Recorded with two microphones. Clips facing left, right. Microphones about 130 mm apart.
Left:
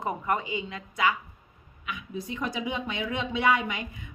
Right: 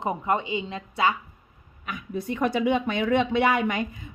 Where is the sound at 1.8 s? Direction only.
50° right (ahead or behind).